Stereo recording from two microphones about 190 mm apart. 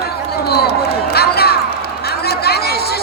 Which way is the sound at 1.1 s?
55° left (ahead or behind).